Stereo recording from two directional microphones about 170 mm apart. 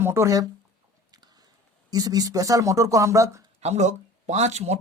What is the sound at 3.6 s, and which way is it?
Speech, 40° right (ahead or behind).